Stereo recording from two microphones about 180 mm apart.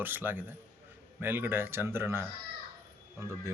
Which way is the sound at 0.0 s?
10° right (ahead or behind).